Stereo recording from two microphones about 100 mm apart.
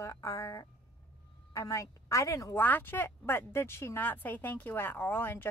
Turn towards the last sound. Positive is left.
turn(degrees=20)  # may be behind; listen again after turning